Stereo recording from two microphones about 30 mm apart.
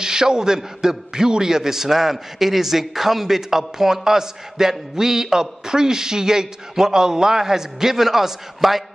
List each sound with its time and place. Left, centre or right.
0.0 s a man's voice: right